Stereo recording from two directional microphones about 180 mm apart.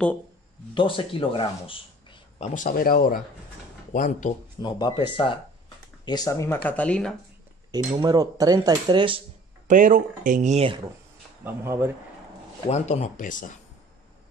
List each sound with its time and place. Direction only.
0.7 s speech: 30° left (ahead or behind); by 4.3 s 50° left (ahead or behind)
4.6 s speech: 25° left (ahead or behind); by 7.2 s 5° left (ahead or behind)
7.7 s speech: 25° right (ahead or behind)
9.7 s speech: 45° right (ahead or behind)
11.4 s speech: 15° right (ahead or behind)
12.6 s speech: 40° left (ahead or behind)